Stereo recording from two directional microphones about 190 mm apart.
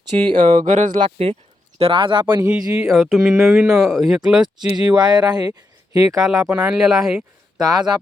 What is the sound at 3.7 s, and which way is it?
Speech, 15° right (ahead or behind).